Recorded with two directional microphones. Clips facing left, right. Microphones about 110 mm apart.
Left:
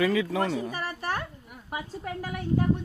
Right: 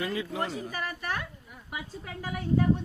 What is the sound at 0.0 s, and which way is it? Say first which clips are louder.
Speech: left 7 dB; 85° left.